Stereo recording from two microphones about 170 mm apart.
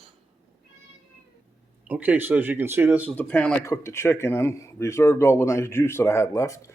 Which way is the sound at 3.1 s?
10° left (ahead or behind).